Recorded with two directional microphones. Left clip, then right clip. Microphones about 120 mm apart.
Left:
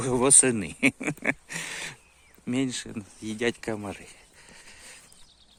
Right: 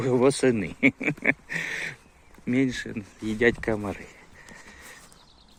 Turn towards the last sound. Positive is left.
turn(degrees=30)  # may be behind; listen again after turning